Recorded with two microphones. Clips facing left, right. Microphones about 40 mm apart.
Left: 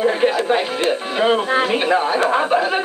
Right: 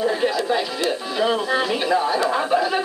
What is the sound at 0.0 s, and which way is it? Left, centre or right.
A woman's voice, left.